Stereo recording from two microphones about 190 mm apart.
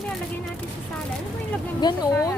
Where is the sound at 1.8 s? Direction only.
20° left (ahead or behind).